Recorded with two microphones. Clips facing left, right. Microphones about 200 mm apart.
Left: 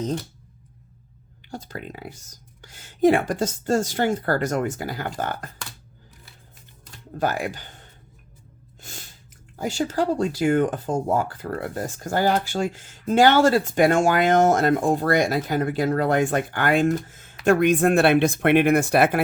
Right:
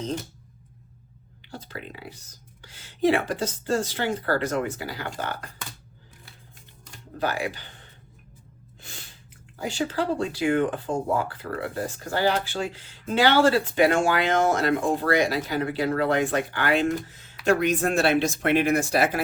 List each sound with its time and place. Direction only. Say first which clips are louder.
1.5 s speech: left 4 dB; 45° left (ahead or behind)
7.2 s speech: left 3 dB; 45° left (ahead or behind)
8.8 s snort: left 3 dB; 45° left (ahead or behind)
9.6 s speech: left 3 dB; 40° left (ahead or behind)